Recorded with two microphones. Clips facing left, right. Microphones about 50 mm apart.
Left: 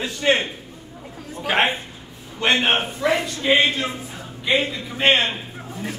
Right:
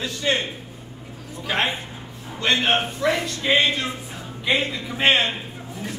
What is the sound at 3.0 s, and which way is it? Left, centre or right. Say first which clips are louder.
A man's voice: left 1 dB; centre.